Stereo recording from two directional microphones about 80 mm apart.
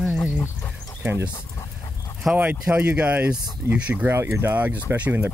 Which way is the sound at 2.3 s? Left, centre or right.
Right.